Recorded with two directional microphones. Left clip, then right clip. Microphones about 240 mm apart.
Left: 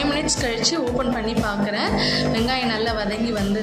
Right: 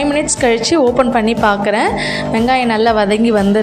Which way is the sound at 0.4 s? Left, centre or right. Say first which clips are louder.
Right 15 dB; right.